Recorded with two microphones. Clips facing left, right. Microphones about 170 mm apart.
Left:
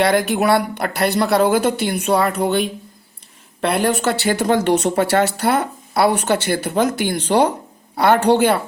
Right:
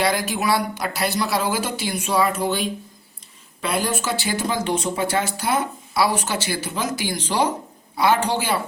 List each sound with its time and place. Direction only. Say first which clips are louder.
0.0 s speech: left 6 dB; 60° left (ahead or behind)